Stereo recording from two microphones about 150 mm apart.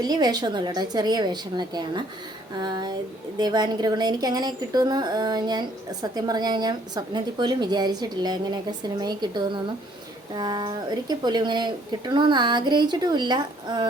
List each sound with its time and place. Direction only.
0.1 s a woman's voice: 25° right (ahead or behind)